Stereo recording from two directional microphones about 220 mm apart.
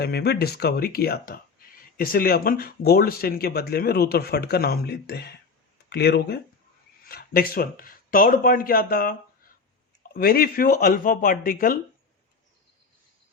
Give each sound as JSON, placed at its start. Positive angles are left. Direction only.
{"t": 0.0, "sound": "speech", "side_deg": 50}